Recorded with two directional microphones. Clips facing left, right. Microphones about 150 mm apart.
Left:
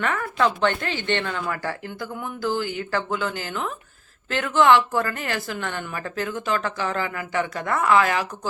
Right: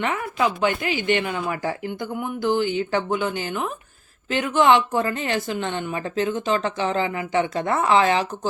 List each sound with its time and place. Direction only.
0.0 s a woman's voice: 20° right (ahead or behind)
0.3 s a woman's voice: 5° right (ahead or behind); by 8.3 s 25° right (ahead or behind)